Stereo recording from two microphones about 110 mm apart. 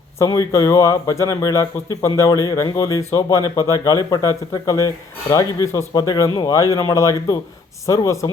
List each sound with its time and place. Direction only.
0.2 s speech: 30° left (ahead or behind)